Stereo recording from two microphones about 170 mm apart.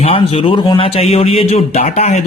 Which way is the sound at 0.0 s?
35° left (ahead or behind).